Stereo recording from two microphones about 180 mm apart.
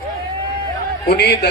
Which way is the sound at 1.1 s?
70° left (ahead or behind).